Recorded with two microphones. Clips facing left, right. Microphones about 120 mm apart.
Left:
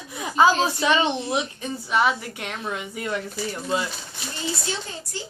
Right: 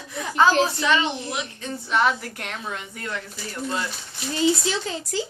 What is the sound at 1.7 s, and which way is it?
A woman's voice, 5° left (ahead or behind).